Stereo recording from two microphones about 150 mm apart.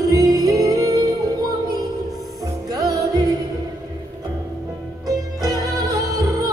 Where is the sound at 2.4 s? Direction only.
25° right (ahead or behind).